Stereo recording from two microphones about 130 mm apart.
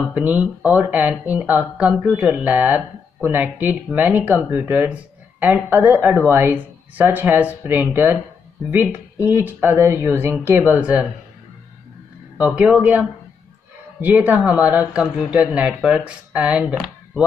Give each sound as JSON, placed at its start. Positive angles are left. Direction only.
{"t": 0.1, "sound": "speech", "side_deg": -10}
{"t": 12.4, "sound": "speech", "side_deg": -10}
{"t": 14.0, "sound": "speech", "side_deg": -15}
{"t": 16.7, "sound": "a sound", "side_deg": -5}